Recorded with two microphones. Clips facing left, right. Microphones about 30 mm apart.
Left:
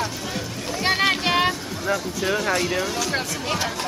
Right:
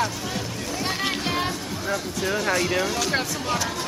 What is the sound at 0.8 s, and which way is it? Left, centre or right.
Music, left.